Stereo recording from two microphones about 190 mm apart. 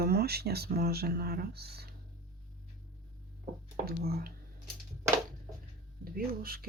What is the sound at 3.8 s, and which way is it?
Speech, 55° right (ahead or behind).